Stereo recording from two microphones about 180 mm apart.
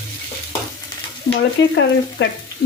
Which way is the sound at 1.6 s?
90° left.